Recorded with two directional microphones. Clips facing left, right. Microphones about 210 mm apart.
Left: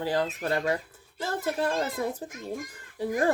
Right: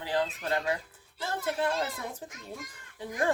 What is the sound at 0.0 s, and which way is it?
Speech, 40° left (ahead or behind).